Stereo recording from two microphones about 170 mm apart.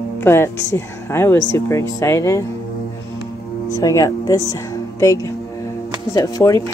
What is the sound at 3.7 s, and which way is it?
Speech, 20° left (ahead or behind).